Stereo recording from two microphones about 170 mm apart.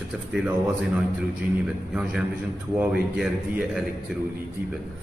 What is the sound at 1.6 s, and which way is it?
Speech, 5° right (ahead or behind).